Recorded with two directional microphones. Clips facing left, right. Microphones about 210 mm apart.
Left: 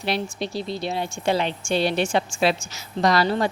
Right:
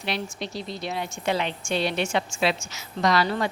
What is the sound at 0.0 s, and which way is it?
Speech, 35° left (ahead or behind).